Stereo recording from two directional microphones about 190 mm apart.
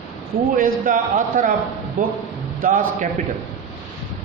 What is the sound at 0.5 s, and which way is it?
A man's voice, 45° right (ahead or behind).